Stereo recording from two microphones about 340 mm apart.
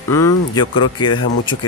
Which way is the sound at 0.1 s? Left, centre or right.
Centre.